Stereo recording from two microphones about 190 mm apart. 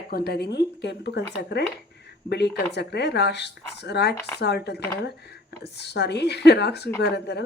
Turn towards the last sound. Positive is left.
turn(degrees=60)  # may be behind; listen again after turning